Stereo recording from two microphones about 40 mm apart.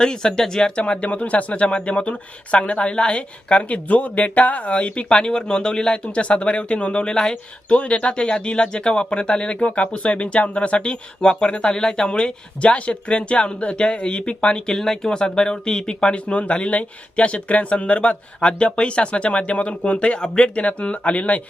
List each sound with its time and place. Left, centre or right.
0.0 s speech: centre
0.8 s speech: left
14.7 s speech: centre
20.6 s speech: left